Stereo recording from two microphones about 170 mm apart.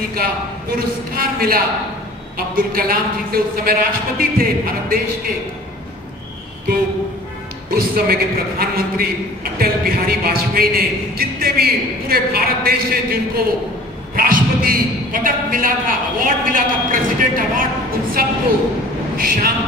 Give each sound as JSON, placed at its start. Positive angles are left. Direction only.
{"t": 0.1, "sound": "a man's voice", "side_deg": -60}
{"t": 7.7, "sound": "a man's voice", "side_deg": -60}
{"t": 19.1, "sound": "a sound", "side_deg": -60}